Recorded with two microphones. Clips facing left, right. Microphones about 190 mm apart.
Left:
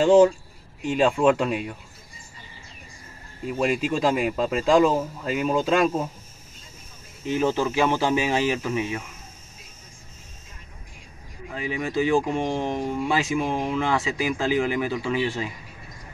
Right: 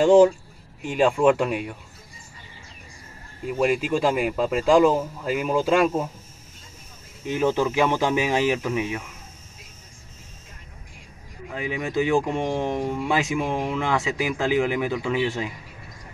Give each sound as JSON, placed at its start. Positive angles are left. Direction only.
{"t": 0.0, "sound": "speech", "side_deg": -10}
{"t": 0.9, "sound": "speech", "side_deg": 0}
{"t": 3.4, "sound": "speech", "side_deg": -5}
{"t": 7.5, "sound": "speech", "side_deg": -15}
{"t": 11.5, "sound": "speech", "side_deg": -15}